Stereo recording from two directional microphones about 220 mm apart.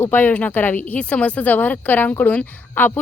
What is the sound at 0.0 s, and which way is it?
Speech, 10° left (ahead or behind).